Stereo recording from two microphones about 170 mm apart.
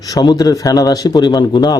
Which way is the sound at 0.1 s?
25° left (ahead or behind).